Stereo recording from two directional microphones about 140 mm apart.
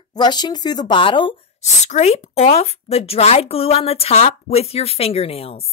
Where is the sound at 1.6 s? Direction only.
55° left (ahead or behind).